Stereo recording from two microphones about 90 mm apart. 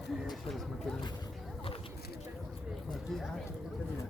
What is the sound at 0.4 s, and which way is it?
Speech, centre (ahead or behind).